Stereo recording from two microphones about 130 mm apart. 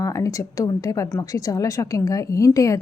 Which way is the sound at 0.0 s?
25° left (ahead or behind).